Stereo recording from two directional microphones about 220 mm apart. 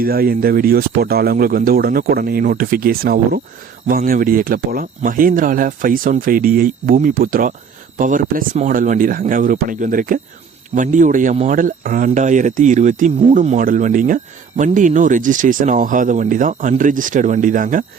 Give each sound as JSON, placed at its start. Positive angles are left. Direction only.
{"t": 0.0, "sound": "speech", "side_deg": -45}